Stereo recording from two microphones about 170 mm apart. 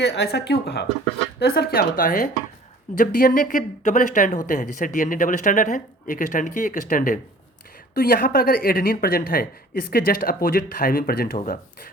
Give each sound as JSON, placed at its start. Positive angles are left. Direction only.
{"t": 0.0, "sound": "speech", "side_deg": 85}